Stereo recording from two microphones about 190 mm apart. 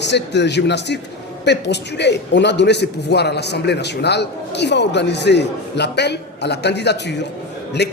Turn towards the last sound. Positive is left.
turn(degrees=60)  # may be behind; listen again after turning